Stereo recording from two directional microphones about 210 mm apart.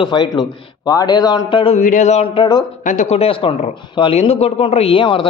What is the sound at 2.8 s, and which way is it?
Speech, 35° left (ahead or behind).